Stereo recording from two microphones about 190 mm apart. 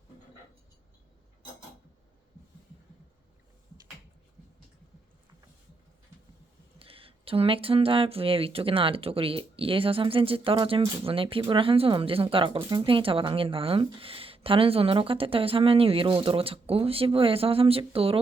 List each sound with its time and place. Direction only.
6.7 s speech: 30° right (ahead or behind)